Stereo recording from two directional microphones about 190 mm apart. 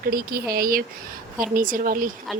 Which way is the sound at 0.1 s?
50° right (ahead or behind).